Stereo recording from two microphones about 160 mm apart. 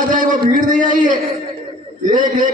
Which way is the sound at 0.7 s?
55° right (ahead or behind).